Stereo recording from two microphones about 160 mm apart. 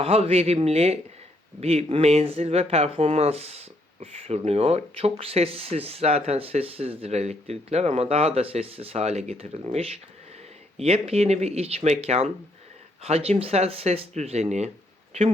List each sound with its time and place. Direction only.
0.0 s speech: 40° right (ahead or behind)
10.8 s speech: 40° right (ahead or behind)